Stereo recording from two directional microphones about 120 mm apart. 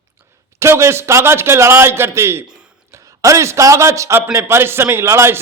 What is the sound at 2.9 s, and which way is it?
A man's voice, 25° right (ahead or behind).